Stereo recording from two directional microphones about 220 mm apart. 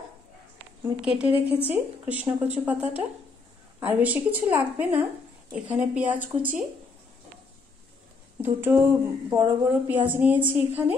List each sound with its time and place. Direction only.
1.0 s a woman's voice: 5° right (ahead or behind)
1.3 s speech: 25° left (ahead or behind)
2.0 s a woman's voice: 5° right (ahead or behind)
8.4 s a woman's voice: 10° right (ahead or behind)